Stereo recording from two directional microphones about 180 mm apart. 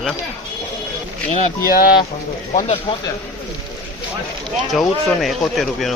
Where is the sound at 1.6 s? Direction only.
55° left (ahead or behind).